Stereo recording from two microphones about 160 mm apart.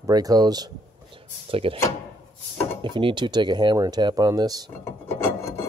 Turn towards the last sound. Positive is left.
turn(degrees=20)  # may be behind; listen again after turning